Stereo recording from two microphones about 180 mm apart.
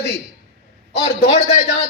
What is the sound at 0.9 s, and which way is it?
Speech, 35° left (ahead or behind).